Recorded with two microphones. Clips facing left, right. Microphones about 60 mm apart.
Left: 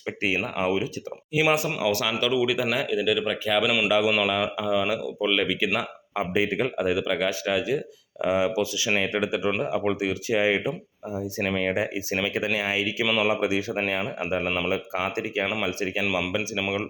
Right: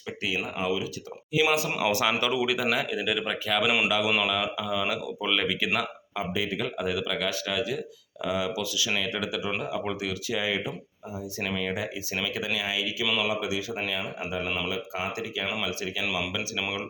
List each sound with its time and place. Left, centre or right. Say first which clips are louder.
0.4 s speech: left 4 dB; left
1.4 s speech: left 2 dB; left
1.8 s speech: left 1 dB; centre
2.9 s speech: left 5 dB; centre
3.8 s speech: left 4 dB; centre
4.8 s speech: left 4 dB; centre
6.1 s speech: left 5 dB; left
6.7 s speech: left 4 dB; centre; by 16.0 s left